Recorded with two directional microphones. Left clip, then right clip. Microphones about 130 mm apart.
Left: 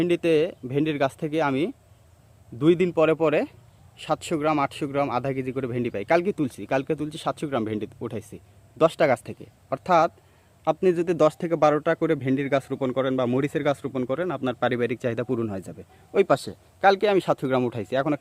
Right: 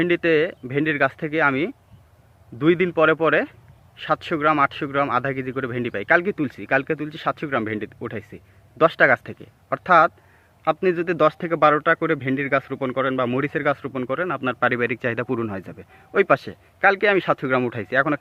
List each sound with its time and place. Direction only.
0.0 s a man's voice: 20° left (ahead or behind)